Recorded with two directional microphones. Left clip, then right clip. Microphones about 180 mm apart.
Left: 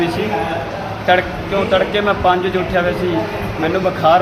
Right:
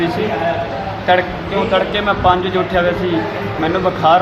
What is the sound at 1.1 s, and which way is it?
Speech, 10° left (ahead or behind).